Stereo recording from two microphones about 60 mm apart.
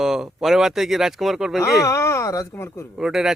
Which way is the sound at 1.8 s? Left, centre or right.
Left.